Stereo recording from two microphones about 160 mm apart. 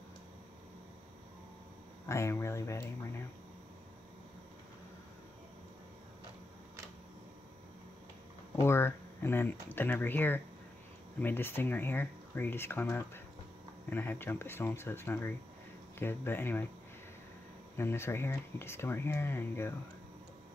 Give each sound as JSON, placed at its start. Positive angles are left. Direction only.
{"t": 2.0, "sound": "speech", "side_deg": 15}
{"t": 8.5, "sound": "speech", "side_deg": 15}
{"t": 17.7, "sound": "speech", "side_deg": 15}